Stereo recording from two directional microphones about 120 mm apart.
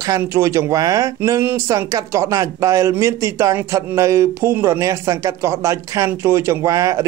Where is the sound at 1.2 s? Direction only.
20° right (ahead or behind).